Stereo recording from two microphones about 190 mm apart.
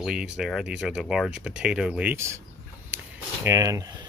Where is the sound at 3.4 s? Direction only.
15° right (ahead or behind).